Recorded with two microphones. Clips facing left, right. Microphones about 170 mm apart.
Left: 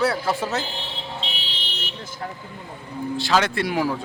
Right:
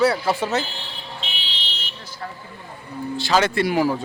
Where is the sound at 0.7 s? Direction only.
25° left (ahead or behind).